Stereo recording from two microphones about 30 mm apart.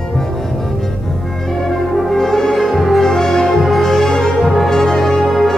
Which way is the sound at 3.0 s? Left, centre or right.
Centre.